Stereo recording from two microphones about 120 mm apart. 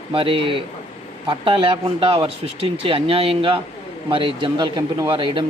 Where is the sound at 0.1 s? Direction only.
50° right (ahead or behind).